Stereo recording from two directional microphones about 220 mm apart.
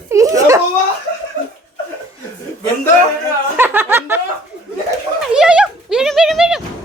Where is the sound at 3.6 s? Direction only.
10° right (ahead or behind).